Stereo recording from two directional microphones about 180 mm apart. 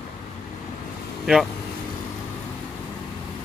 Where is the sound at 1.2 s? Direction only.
Centre (ahead or behind).